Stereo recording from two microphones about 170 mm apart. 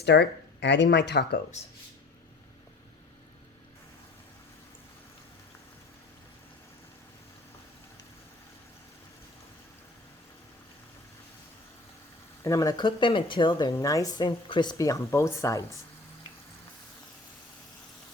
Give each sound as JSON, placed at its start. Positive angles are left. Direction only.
{"t": 0.0, "sound": "speech", "side_deg": 85}
{"t": 12.4, "sound": "speech", "side_deg": 20}